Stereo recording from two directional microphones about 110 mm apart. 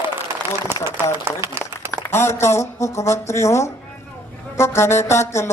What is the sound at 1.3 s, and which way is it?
Speech, 20° right (ahead or behind).